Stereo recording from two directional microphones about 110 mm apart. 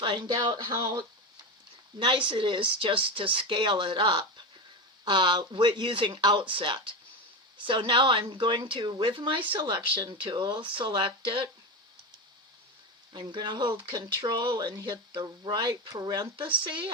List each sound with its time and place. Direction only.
0.0 s speech: 45° right (ahead or behind)
2.0 s speech: 50° right (ahead or behind)
13.1 s speech: 45° right (ahead or behind)